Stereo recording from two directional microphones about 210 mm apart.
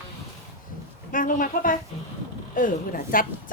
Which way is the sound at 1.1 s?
40° left (ahead or behind).